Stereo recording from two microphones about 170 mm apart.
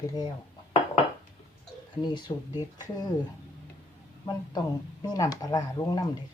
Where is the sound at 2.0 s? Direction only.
25° left (ahead or behind).